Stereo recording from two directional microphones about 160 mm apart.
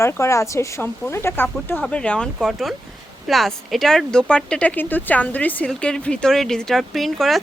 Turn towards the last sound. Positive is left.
turn(degrees=0)  # may be behind; listen again after turning